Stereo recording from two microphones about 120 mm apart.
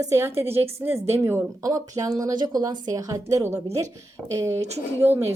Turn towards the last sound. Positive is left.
turn(degrees=-15)  # may be behind; listen again after turning